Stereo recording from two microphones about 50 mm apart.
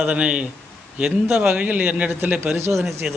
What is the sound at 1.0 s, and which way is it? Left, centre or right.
Speech, centre.